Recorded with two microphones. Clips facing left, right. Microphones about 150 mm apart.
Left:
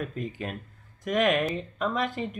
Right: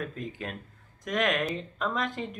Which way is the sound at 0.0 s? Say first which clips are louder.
Left 3 dB; centre (ahead or behind).